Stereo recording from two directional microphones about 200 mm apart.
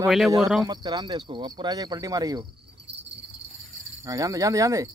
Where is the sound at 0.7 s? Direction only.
20° right (ahead or behind).